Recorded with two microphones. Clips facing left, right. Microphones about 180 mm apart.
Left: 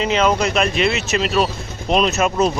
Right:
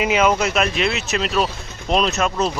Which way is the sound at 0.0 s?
10° right (ahead or behind).